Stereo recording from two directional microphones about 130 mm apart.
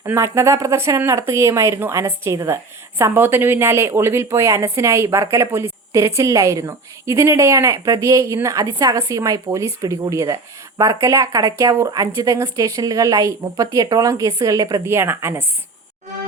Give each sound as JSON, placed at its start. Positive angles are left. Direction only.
{"t": 0.0, "sound": "a woman's voice", "side_deg": -20}